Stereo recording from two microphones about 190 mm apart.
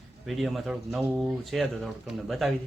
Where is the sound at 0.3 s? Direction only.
Centre (ahead or behind).